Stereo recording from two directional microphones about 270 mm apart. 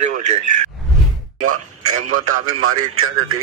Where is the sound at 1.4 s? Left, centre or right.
Right.